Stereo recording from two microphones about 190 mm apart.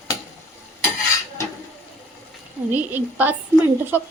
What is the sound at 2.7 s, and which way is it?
Speech, 10° right (ahead or behind).